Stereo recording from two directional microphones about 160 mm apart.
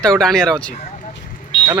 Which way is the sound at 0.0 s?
5° left (ahead or behind).